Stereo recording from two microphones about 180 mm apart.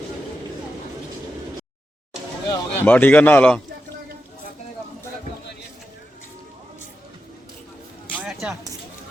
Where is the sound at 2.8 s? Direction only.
10° left (ahead or behind).